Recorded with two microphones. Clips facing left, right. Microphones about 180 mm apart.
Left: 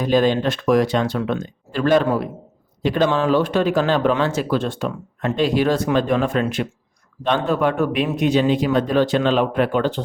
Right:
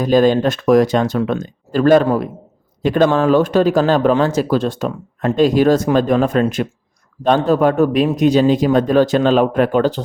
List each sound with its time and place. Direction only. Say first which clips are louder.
0.0 s speech: right 4 dB; 40° right (ahead or behind)